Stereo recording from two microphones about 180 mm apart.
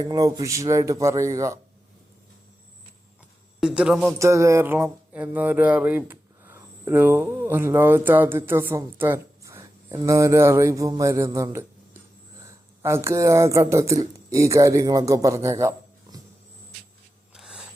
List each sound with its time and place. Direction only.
0.0 s speech: 20° right (ahead or behind)
3.6 s a man's voice: 5° right (ahead or behind)
4.2 s speech: 15° right (ahead or behind)
12.8 s speech: 15° right (ahead or behind)
17.3 s a sound: 5° right (ahead or behind)